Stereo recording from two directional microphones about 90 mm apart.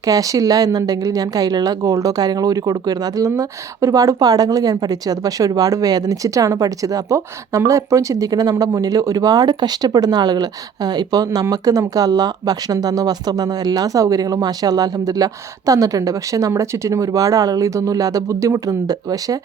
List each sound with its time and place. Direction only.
0.0 s a woman's voice: 40° right (ahead or behind)